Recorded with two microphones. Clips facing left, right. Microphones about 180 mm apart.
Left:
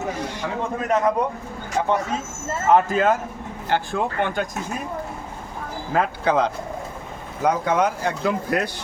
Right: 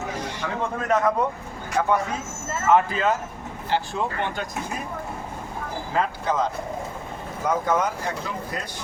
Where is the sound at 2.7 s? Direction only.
45° left (ahead or behind).